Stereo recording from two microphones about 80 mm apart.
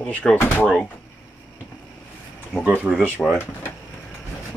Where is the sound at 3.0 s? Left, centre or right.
Centre.